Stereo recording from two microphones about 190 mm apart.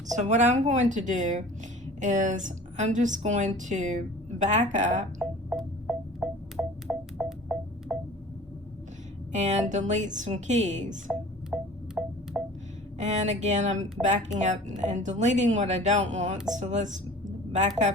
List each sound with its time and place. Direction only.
0.2 s speech: 40° right (ahead or behind)
5.2 s music: centre (ahead or behind)
9.3 s speech: 40° right (ahead or behind)
11.1 s a sound: centre (ahead or behind)
13.0 s speech: 40° right (ahead or behind)